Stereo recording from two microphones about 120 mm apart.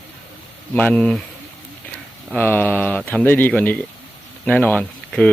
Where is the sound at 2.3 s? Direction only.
20° left (ahead or behind).